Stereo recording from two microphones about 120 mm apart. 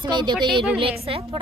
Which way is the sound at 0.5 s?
50° right (ahead or behind).